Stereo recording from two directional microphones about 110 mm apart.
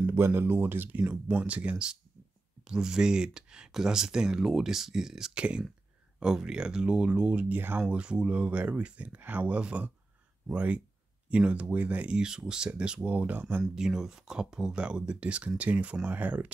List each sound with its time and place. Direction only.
0.0 s speech: 20° right (ahead or behind)